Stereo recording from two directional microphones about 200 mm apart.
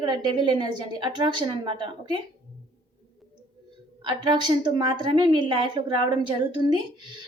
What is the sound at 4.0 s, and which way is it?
A woman's voice, 20° right (ahead or behind).